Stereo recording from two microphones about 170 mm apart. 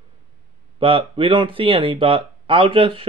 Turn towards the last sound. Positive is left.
turn(degrees=-30)  # may be behind; listen again after turning